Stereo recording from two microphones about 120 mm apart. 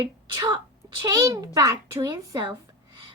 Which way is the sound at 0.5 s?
35° right (ahead or behind).